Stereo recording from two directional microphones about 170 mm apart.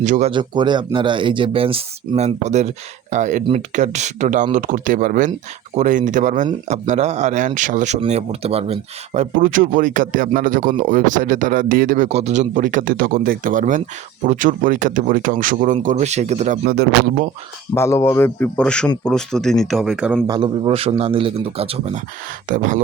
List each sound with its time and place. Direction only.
0.0 s speech: 45° right (ahead or behind)
0.3 s a man's voice: 25° right (ahead or behind)
16.6 s speech: 65° right (ahead or behind)
17.7 s a man's voice: 15° left (ahead or behind); by 20.2 s 5° right (ahead or behind)
20.2 s speech: 25° right (ahead or behind)
22.4 s speech: 50° right (ahead or behind)